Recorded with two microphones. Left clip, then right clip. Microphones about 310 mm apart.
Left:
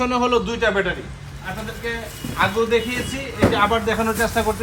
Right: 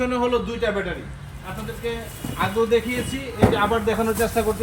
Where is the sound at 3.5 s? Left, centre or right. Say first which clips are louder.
Left 2 dB; centre.